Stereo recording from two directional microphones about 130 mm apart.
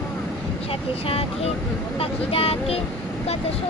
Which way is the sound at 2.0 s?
45° left (ahead or behind).